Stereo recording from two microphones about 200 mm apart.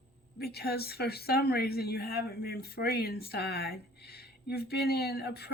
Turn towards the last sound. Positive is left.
turn(degrees=50)  # may be behind; listen again after turning